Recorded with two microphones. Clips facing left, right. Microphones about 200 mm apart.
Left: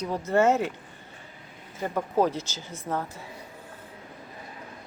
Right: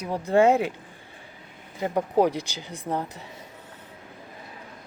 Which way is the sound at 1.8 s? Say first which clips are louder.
Right 3 dB; 15° right (ahead or behind).